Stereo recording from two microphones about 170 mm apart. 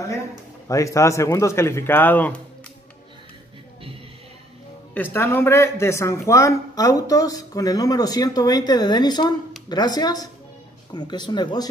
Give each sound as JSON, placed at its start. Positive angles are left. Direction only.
{"t": 0.7, "sound": "speech", "side_deg": 20}
{"t": 4.9, "sound": "speech", "side_deg": 10}